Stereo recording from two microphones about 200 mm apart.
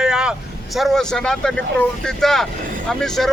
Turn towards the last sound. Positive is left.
turn(degrees=5)  # may be behind; listen again after turning